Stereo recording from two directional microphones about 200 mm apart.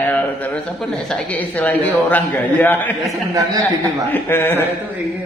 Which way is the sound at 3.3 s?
20° right (ahead or behind).